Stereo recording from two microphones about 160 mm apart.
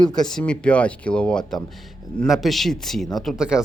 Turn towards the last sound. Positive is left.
turn(degrees=-5)  # may be behind; listen again after turning